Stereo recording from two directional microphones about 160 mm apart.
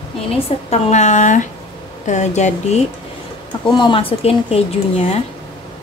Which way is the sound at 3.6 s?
30° left (ahead or behind).